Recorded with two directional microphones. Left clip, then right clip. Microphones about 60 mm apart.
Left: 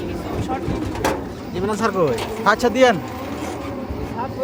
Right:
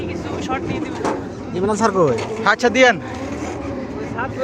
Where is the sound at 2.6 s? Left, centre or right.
Centre.